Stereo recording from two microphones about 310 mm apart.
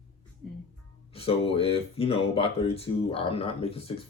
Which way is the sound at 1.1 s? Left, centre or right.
Centre.